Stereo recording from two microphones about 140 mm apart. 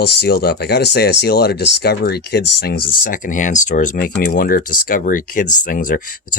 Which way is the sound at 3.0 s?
75° left (ahead or behind).